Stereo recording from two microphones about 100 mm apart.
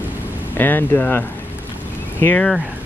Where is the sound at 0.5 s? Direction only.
20° left (ahead or behind).